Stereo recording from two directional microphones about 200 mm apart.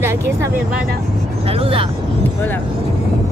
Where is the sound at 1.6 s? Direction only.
30° right (ahead or behind).